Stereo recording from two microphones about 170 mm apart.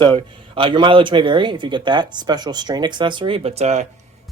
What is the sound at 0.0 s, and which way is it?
Speech, 30° right (ahead or behind).